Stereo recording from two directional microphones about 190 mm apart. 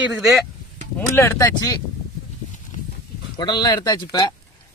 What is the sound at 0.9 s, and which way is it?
Speech, 15° left (ahead or behind).